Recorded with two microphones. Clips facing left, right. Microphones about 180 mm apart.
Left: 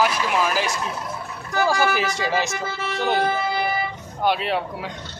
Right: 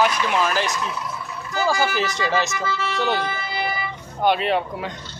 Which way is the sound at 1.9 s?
10° left (ahead or behind).